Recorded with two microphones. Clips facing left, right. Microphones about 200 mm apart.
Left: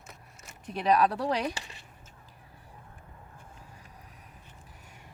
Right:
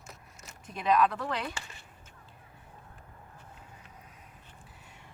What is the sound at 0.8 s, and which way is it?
Speech, 35° left (ahead or behind).